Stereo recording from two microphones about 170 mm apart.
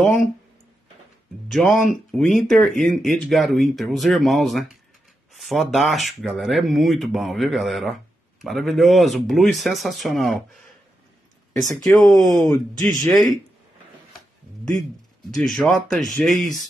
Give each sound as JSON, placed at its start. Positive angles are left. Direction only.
{"t": 1.5, "sound": "speech", "side_deg": 0}
{"t": 11.8, "sound": "speech", "side_deg": 0}
{"t": 12.4, "sound": "speech", "side_deg": 20}
{"t": 13.0, "sound": "speech", "side_deg": 0}
{"t": 15.3, "sound": "speech", "side_deg": 0}